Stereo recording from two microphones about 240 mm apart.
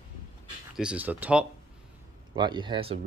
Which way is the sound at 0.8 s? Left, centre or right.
Centre.